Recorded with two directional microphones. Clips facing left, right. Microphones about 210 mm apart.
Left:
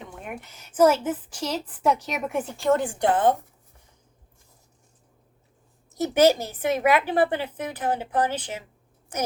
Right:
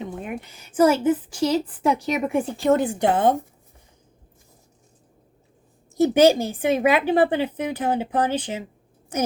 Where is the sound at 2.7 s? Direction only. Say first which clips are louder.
Right 2 dB; 20° right (ahead or behind).